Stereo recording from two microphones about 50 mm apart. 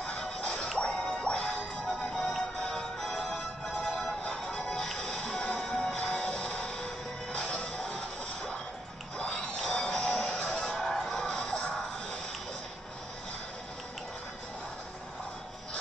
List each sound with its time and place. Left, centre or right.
0.4 s music: left
0.7 s music: centre
4.2 s music: centre
9.2 s a sound: centre
9.7 s music: centre